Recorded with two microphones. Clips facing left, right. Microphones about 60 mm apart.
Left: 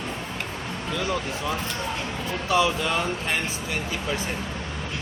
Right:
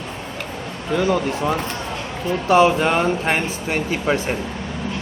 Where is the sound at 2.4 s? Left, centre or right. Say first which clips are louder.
Right 8 dB; right.